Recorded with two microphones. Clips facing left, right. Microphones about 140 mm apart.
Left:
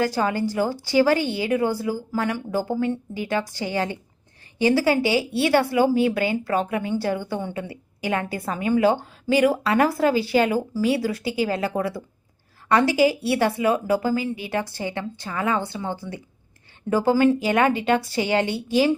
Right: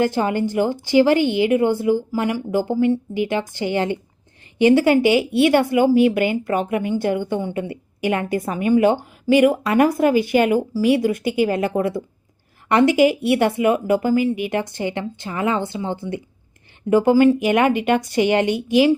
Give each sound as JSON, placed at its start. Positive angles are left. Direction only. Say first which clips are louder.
{"t": 0.0, "sound": "a woman's voice", "louder": "right 3 dB", "side_deg": -20}